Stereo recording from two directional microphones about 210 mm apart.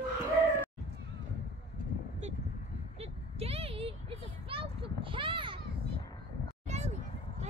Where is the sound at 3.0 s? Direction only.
30° right (ahead or behind).